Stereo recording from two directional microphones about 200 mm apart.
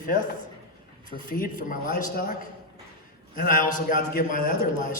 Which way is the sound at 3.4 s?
45° left (ahead or behind).